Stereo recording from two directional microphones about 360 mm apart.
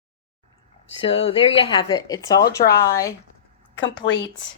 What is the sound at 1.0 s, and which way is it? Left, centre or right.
A woman's voice, centre.